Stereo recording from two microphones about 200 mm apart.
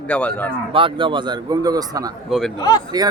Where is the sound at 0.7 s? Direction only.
25° right (ahead or behind).